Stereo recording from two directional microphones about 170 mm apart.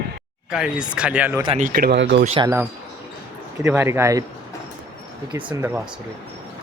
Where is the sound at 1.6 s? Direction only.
60° right (ahead or behind); by 2.2 s 90° right.